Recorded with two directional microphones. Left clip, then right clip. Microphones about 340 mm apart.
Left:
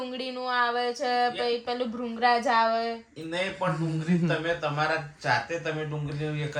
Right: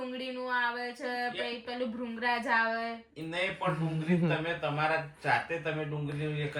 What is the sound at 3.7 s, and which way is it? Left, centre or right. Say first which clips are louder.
Speech: left 2 dB; centre.